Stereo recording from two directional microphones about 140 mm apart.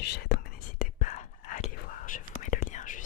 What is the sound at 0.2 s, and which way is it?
Whispering, 90° left.